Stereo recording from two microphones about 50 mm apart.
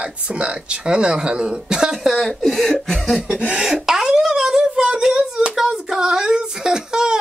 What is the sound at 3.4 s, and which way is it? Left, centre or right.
Speech, right.